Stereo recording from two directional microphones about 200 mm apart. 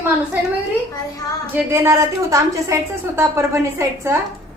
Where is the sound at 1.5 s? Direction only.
10° right (ahead or behind).